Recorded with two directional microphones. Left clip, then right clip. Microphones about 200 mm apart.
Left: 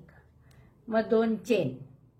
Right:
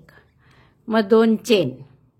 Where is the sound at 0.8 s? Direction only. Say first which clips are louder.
Right 9 dB; 45° right (ahead or behind).